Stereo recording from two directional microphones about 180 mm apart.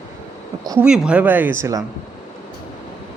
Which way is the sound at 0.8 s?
5° right (ahead or behind).